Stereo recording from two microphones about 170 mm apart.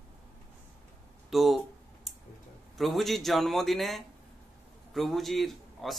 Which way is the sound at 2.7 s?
Centre (ahead or behind).